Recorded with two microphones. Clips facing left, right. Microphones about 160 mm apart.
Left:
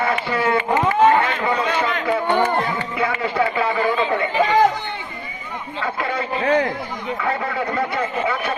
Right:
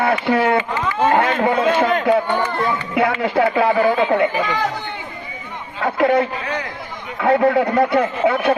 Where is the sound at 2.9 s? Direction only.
60° right (ahead or behind).